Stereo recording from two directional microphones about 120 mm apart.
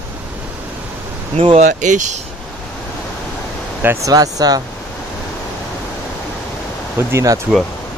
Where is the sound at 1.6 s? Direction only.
90° right.